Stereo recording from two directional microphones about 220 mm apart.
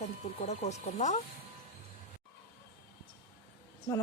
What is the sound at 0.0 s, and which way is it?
Speech, 30° left (ahead or behind).